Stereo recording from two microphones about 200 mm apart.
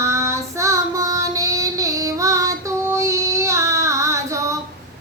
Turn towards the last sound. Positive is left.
turn(degrees=-15)  # may be behind; listen again after turning